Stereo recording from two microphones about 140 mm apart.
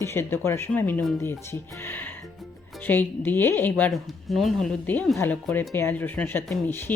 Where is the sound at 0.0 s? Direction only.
15° left (ahead or behind).